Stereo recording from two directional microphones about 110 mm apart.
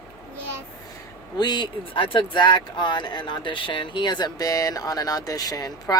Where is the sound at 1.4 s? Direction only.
40° left (ahead or behind).